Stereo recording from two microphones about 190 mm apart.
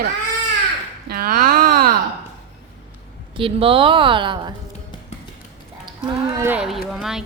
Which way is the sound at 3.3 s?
30° right (ahead or behind).